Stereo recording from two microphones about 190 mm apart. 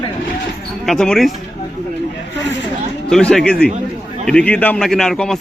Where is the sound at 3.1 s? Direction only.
5° left (ahead or behind).